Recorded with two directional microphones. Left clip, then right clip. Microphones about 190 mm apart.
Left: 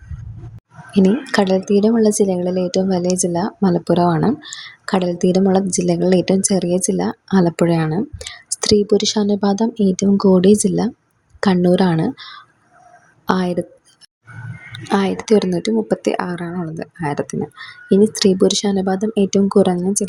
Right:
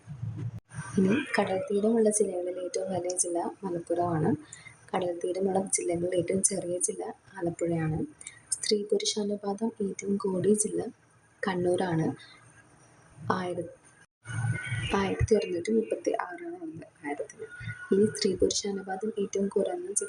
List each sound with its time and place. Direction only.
1.3 s speech: 40° left (ahead or behind)
13.2 s speech: 45° left (ahead or behind)
14.8 s speech: 40° left (ahead or behind)